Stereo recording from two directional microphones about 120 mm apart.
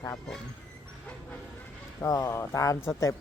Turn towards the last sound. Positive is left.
turn(degrees=25)  # may be behind; listen again after turning